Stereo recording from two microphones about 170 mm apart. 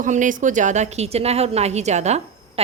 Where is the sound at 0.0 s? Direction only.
50° right (ahead or behind).